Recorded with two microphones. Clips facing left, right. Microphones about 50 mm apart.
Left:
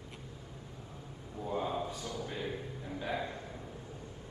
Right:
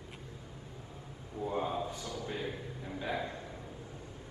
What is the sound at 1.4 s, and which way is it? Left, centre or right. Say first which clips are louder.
Speech: right 1 dB; right.